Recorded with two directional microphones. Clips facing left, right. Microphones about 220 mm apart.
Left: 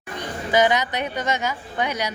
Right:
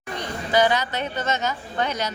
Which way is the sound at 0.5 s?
15° left (ahead or behind).